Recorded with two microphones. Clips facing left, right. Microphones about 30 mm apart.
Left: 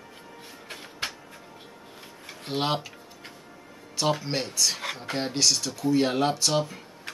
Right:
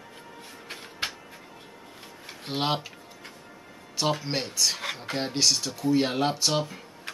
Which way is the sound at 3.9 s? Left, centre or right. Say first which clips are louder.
Left 1 dB; centre.